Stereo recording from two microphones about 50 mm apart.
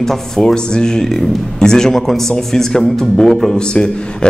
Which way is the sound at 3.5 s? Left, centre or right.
Centre.